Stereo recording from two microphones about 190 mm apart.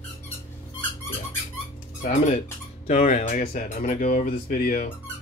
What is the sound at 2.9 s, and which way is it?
Speech, 35° left (ahead or behind).